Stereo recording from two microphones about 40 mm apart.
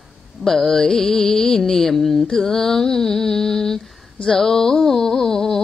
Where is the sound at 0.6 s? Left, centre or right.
Centre.